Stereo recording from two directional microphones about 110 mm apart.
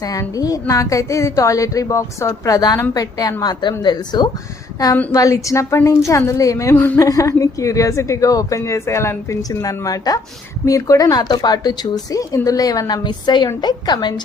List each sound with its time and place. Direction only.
0.1 s a woman's voice: 35° left (ahead or behind)
5.1 s a woman's voice: 30° left (ahead or behind)